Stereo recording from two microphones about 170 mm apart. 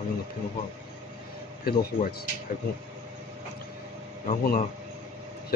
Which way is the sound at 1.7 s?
60° left (ahead or behind).